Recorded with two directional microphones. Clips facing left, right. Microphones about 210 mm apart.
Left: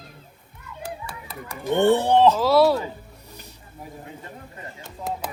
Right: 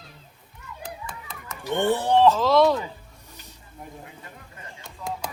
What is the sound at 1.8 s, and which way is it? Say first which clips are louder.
Speech: left 2 dB; 25° left (ahead or behind).